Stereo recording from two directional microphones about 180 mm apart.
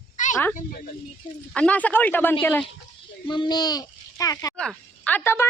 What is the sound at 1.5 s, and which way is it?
Speech, 5° left (ahead or behind).